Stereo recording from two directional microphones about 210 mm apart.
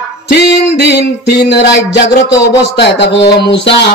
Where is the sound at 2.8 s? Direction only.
55° left (ahead or behind).